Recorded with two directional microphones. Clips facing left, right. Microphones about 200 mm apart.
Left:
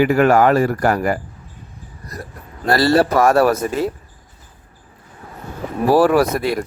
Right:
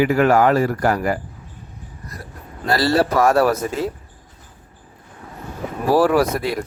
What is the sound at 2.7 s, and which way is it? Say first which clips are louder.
Speech: left 3 dB; 55° left (ahead or behind).